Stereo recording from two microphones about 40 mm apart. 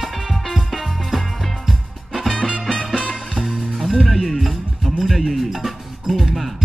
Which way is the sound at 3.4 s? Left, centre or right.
Centre.